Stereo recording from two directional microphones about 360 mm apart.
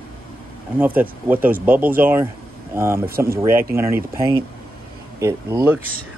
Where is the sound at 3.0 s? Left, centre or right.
Right.